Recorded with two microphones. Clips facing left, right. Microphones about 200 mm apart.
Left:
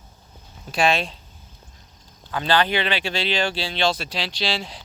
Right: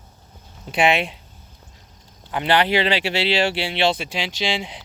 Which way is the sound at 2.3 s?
20° right (ahead or behind).